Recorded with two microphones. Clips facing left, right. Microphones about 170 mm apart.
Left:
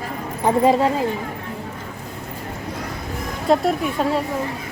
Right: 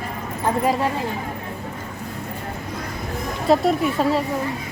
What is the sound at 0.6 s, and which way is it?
Speech, 25° left (ahead or behind).